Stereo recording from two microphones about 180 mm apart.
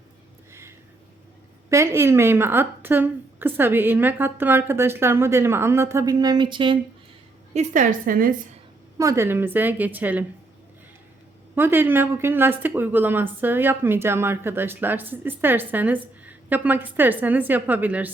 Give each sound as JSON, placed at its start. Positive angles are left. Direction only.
{"t": 1.7, "sound": "a woman's voice", "side_deg": -15}
{"t": 7.5, "sound": "a woman's voice", "side_deg": -40}
{"t": 9.0, "sound": "a woman's voice", "side_deg": -15}
{"t": 11.5, "sound": "a woman's voice", "side_deg": -10}